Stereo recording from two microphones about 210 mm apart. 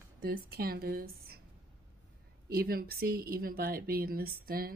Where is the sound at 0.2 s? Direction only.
45° right (ahead or behind).